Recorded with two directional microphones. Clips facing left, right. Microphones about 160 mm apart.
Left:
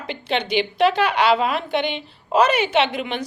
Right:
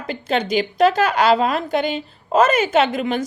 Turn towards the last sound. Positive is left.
turn(degrees=-45)  # may be behind; listen again after turning